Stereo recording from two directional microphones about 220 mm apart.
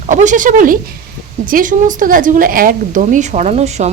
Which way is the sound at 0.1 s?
35° right (ahead or behind).